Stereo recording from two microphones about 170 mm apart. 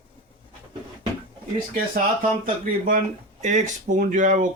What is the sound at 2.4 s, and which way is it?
Speech, 55° right (ahead or behind).